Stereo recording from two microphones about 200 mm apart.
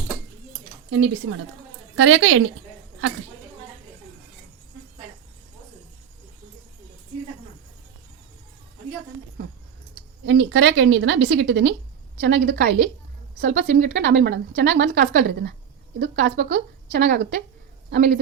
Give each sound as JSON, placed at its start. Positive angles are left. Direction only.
{"t": 0.9, "sound": "speech", "side_deg": -75}
{"t": 9.9, "sound": "a woman's voice", "side_deg": -65}